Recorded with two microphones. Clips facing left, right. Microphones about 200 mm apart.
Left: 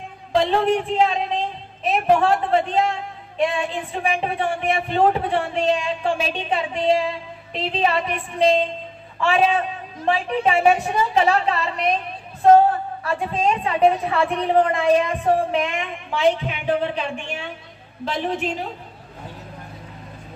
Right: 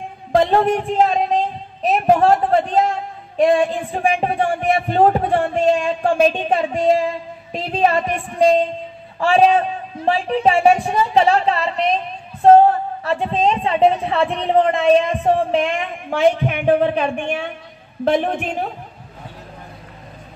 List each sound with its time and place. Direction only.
0.3 s a woman's voice: 50° right (ahead or behind); by 15.7 s 30° right (ahead or behind)
16.1 s a woman's voice: 55° right (ahead or behind)